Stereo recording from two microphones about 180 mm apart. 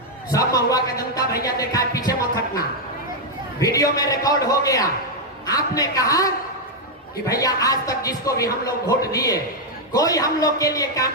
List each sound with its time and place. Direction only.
0.3 s speech: 20° left (ahead or behind)
3.6 s speech: 20° left (ahead or behind)